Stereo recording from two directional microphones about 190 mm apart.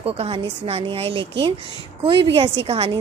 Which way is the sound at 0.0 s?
30° right (ahead or behind).